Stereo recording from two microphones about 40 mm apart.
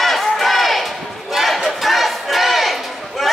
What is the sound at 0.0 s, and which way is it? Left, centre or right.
Crowd, centre.